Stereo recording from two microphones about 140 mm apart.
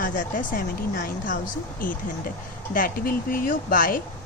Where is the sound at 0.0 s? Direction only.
75° left (ahead or behind).